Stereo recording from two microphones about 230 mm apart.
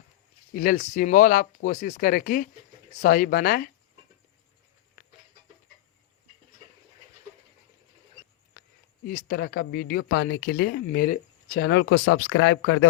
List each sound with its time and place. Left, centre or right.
0.5 s speech: left
9.0 s speech: left